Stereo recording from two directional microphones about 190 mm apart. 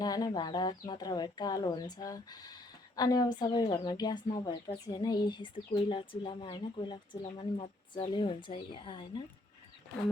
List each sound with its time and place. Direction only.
0.0 s speech: 20° left (ahead or behind)